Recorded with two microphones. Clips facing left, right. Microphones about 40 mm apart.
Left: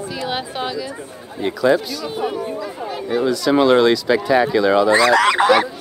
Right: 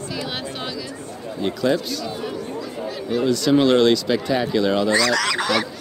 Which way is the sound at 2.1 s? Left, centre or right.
Left.